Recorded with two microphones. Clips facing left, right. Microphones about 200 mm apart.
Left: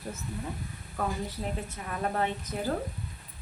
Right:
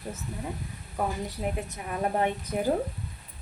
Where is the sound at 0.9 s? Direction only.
15° right (ahead or behind).